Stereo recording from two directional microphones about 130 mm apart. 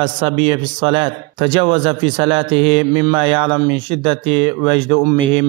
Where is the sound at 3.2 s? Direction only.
40° right (ahead or behind).